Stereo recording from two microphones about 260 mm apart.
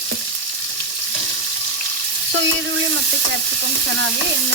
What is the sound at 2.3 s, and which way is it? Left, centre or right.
Frying, right.